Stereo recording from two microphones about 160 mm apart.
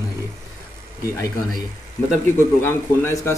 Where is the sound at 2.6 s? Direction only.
15° left (ahead or behind).